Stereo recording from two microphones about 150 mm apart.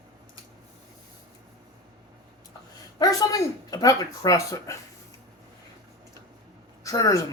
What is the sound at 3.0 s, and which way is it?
Speech, 25° left (ahead or behind).